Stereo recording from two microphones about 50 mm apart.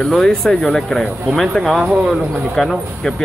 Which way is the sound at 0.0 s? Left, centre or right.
Centre.